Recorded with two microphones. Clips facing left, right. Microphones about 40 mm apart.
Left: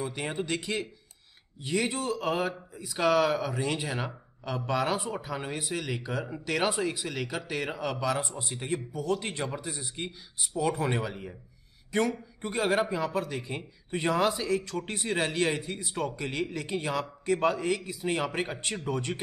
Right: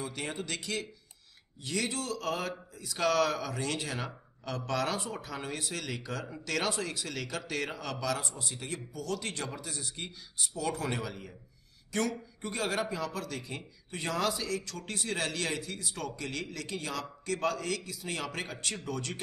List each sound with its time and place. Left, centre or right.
0.0 s a man's voice: centre